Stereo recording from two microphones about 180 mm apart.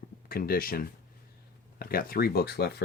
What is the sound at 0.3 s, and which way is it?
Speech, 55° left (ahead or behind).